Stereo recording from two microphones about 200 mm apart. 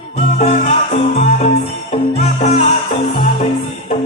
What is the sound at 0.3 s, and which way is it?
Music, 35° left (ahead or behind).